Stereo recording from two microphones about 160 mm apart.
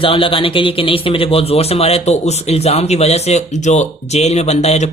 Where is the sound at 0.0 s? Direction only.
35° left (ahead or behind).